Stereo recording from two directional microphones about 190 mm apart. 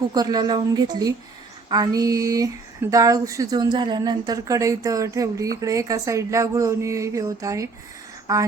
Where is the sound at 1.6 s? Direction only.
20° right (ahead or behind).